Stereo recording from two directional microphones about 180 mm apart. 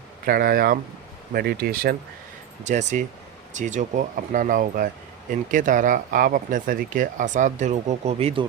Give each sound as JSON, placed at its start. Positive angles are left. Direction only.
{"t": 0.3, "sound": "speech", "side_deg": -55}
{"t": 2.6, "sound": "speech", "side_deg": -40}